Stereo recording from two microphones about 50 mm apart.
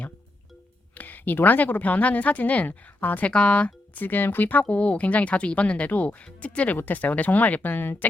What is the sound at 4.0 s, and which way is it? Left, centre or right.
Speech, left.